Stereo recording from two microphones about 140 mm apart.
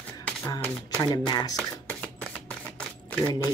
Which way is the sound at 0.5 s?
30° left (ahead or behind).